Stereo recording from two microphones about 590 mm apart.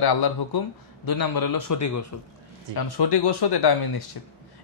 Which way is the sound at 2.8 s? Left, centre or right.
Left.